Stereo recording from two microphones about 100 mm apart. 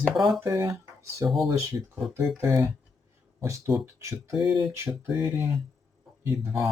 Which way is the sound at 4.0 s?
30° right (ahead or behind).